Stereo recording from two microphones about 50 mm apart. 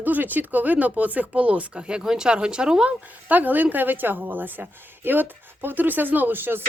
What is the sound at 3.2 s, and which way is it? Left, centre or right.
Speech, right.